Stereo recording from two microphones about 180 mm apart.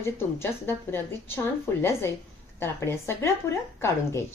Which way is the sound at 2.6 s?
15° left (ahead or behind).